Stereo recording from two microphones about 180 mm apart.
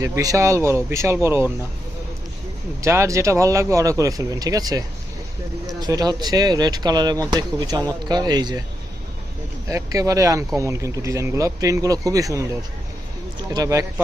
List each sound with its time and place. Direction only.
0.0 s speech: 20° right (ahead or behind)
2.8 s speech: 15° right (ahead or behind)
9.6 s speech: 20° right (ahead or behind)
13.5 s speech: 20° right (ahead or behind)